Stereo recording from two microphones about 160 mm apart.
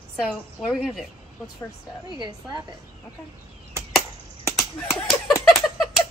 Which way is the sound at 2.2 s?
30° right (ahead or behind).